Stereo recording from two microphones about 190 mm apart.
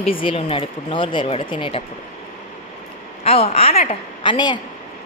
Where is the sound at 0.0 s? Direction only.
30° left (ahead or behind).